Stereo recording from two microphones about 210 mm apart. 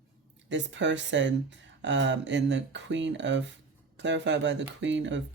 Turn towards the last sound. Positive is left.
turn(degrees=-60)  # may be behind; listen again after turning